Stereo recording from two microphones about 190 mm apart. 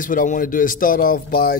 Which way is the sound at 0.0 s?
45° left (ahead or behind).